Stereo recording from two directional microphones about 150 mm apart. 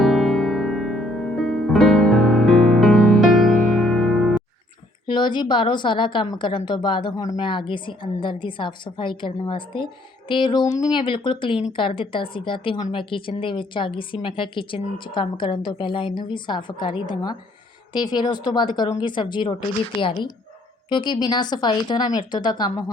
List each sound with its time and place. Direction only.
0.0 s music: centre (ahead or behind)
5.0 s a woman's voice: 30° left (ahead or behind)